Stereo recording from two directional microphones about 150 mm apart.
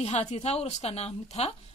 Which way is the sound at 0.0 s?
50° left (ahead or behind).